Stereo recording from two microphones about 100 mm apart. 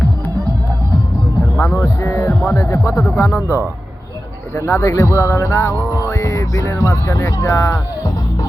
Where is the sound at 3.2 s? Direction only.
15° right (ahead or behind).